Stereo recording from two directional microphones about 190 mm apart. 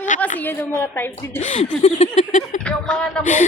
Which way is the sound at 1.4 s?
40° left (ahead or behind).